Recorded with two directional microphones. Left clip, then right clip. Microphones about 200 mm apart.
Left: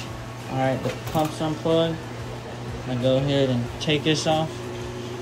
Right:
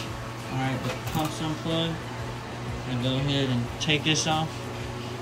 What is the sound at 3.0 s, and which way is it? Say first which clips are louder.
Speech: left 7 dB; centre (ahead or behind).